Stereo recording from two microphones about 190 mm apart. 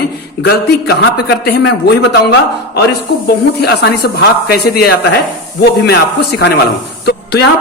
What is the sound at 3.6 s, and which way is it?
A man's voice, 60° left (ahead or behind).